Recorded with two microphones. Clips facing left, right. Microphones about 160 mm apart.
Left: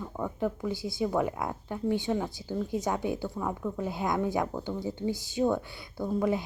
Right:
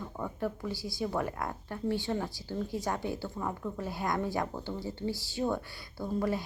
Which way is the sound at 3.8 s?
20° left (ahead or behind).